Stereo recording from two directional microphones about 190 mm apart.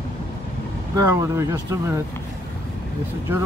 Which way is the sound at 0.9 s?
15° right (ahead or behind).